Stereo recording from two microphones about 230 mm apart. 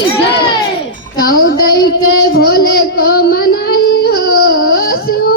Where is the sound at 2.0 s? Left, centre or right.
Left.